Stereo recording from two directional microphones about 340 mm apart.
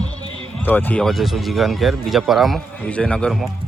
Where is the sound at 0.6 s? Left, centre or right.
Centre.